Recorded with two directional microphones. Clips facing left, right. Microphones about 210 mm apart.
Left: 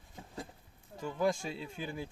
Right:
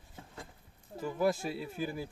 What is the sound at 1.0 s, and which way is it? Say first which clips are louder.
Speech: right 2 dB; 5° right (ahead or behind).